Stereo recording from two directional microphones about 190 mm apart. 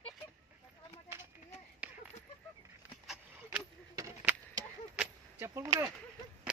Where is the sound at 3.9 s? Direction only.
20° right (ahead or behind).